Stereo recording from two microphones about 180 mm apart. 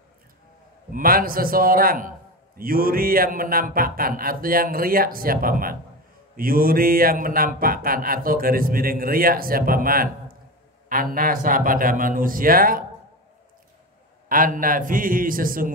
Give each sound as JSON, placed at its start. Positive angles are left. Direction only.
{"t": 0.9, "sound": "a man's voice", "side_deg": -55}
{"t": 14.3, "sound": "a man's voice", "side_deg": -50}